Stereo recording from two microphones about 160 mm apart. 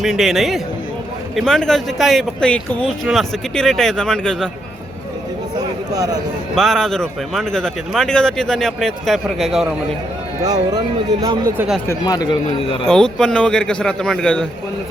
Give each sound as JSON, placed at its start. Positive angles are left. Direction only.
{"t": 0.0, "sound": "speech", "side_deg": 0}
{"t": 5.9, "sound": "speech", "side_deg": -20}
{"t": 6.6, "sound": "speech", "side_deg": 0}
{"t": 10.4, "sound": "speech", "side_deg": -25}
{"t": 11.5, "sound": "speech", "side_deg": -10}
{"t": 11.9, "sound": "speech", "side_deg": 25}
{"t": 12.9, "sound": "speech", "side_deg": 5}